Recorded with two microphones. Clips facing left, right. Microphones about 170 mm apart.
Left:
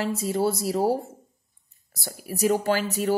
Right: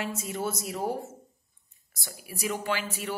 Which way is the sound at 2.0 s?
40° left (ahead or behind).